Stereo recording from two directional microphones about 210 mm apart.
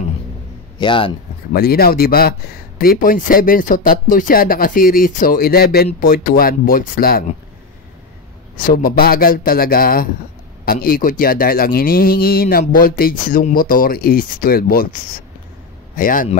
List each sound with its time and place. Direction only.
0.7 s speech: 25° left (ahead or behind)
1.5 s speech: 45° left (ahead or behind)
8.5 s speech: 40° left (ahead or behind)
16.0 s speech: 40° left (ahead or behind)